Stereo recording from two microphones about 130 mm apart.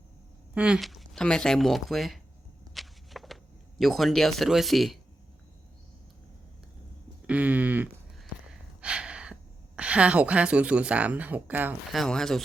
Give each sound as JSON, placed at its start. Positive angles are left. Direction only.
{"t": 0.5, "sound": "speech", "side_deg": -5}
{"t": 2.7, "sound": "walk", "side_deg": 0}
{"t": 3.8, "sound": "speech", "side_deg": 0}
{"t": 7.3, "sound": "a sound", "side_deg": -10}
{"t": 11.9, "sound": "speech", "side_deg": 0}